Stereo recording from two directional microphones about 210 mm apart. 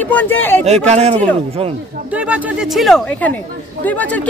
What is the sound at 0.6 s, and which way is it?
Speech, 30° right (ahead or behind).